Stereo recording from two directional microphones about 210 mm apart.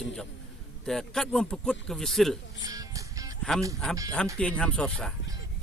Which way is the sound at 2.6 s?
15° right (ahead or behind).